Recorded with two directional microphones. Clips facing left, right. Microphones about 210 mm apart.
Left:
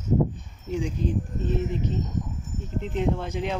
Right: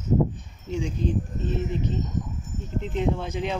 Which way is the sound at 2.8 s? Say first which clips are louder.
Even; 5° left (ahead or behind).